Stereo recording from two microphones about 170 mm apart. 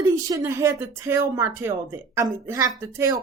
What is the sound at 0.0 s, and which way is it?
A woman's voice, 15° right (ahead or behind).